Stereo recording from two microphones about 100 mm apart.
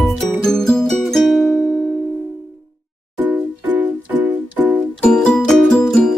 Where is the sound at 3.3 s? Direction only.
15° right (ahead or behind).